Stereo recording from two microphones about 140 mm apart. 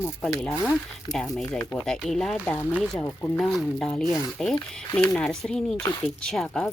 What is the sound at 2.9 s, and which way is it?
Speech, 15° left (ahead or behind).